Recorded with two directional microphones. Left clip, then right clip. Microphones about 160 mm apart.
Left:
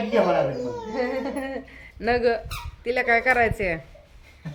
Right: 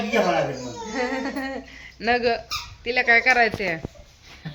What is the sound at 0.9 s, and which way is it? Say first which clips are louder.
Music: right 1 dB; 15° right (ahead or behind).